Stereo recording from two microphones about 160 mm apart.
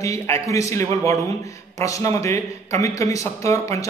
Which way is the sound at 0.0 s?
20° left (ahead or behind).